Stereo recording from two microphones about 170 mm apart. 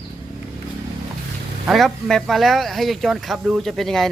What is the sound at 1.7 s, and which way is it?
Speech, centre (ahead or behind).